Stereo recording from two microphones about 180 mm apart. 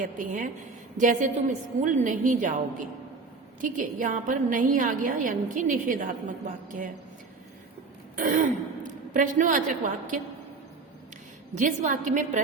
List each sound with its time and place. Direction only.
0.0 s a woman's voice: 45° right (ahead or behind)
8.1 s speech: 45° right (ahead or behind)
11.5 s a woman's voice: 45° right (ahead or behind)